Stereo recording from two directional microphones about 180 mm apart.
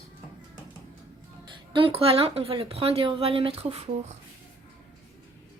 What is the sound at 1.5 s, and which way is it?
Speech, 30° right (ahead or behind).